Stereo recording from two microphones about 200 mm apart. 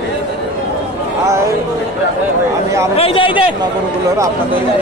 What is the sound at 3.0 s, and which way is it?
Speech, 25° left (ahead or behind).